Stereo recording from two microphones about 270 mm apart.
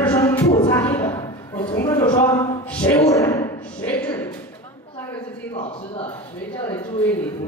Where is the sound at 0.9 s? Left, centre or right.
Centre.